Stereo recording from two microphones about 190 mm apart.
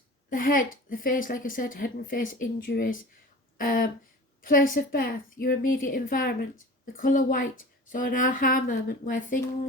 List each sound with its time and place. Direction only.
0.3 s a woman's voice: 45° left (ahead or behind)